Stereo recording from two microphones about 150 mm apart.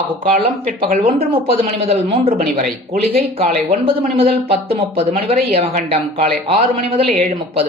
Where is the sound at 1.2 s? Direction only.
35° right (ahead or behind).